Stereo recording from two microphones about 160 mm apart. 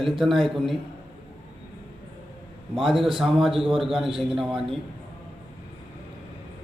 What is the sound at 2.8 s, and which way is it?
A man's voice, centre (ahead or behind).